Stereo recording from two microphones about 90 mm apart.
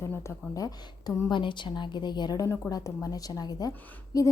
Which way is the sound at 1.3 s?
60° left (ahead or behind).